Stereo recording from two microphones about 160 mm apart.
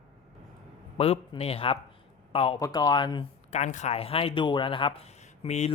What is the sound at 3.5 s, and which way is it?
Speech, 45° left (ahead or behind).